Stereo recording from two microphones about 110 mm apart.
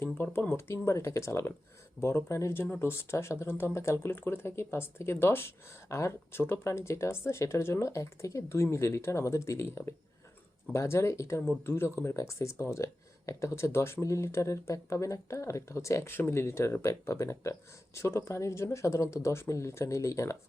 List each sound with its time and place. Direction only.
0.0 s speech: 20° left (ahead or behind)